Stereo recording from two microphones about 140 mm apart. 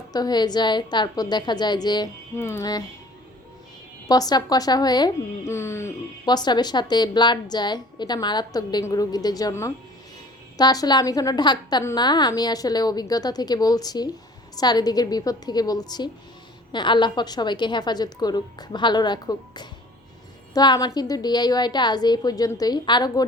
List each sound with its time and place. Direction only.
0.1 s a woman's voice: 30° left (ahead or behind)
2.4 s a woman's voice: 20° left (ahead or behind)
4.1 s a woman's voice: 25° left (ahead or behind)
5.5 s a woman's voice: 20° left (ahead or behind)
6.2 s a woman's voice: 30° left (ahead or behind)